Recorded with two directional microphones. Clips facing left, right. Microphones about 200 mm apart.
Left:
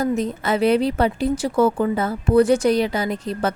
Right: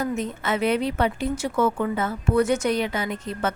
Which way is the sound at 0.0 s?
35° left (ahead or behind).